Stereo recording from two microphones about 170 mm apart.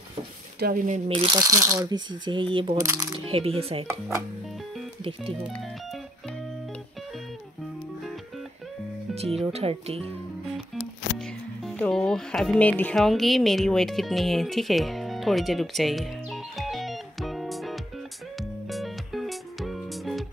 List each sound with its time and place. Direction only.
0.6 s speech: 60° right (ahead or behind); by 1.3 s 35° right (ahead or behind)
1.3 s speech: 20° right (ahead or behind)
2.8 s speech: 15° right (ahead or behind)
3.3 s speech: 35° right (ahead or behind)
9.1 s speech: 35° right (ahead or behind)
10.7 s music: centre (ahead or behind)